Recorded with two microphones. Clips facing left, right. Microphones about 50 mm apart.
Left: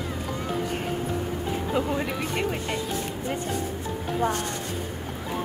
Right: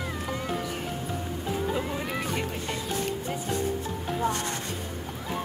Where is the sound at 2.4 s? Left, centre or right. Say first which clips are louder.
Left 4 dB; left.